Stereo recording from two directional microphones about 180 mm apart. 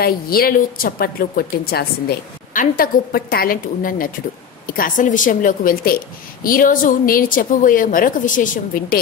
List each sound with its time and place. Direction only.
0.0 s a woman's voice: 55° left (ahead or behind)